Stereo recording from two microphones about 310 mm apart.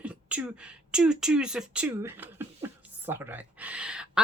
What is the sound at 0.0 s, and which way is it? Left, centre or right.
Speech, centre.